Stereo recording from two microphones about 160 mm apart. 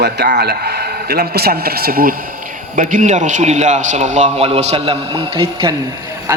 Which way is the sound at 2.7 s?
50° right (ahead or behind).